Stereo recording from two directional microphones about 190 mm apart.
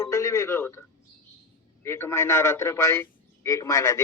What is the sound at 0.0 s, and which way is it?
Radio, 15° left (ahead or behind).